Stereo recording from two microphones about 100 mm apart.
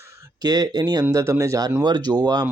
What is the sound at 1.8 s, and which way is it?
Speech, 45° right (ahead or behind).